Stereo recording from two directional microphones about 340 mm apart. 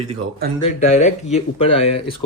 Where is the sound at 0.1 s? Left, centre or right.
Right.